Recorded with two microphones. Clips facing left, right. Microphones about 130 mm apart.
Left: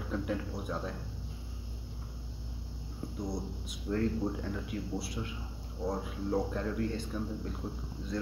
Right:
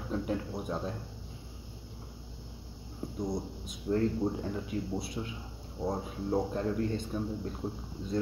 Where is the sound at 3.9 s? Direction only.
20° right (ahead or behind).